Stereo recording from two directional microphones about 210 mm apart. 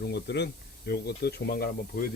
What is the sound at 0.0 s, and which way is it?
Speech, 50° left (ahead or behind).